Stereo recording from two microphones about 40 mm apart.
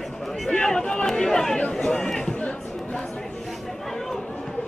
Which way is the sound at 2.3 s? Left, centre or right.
Left.